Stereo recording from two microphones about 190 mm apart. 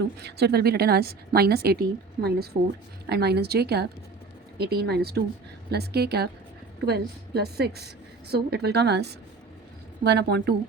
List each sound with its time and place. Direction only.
0.0 s a woman's voice: 60° right (ahead or behind)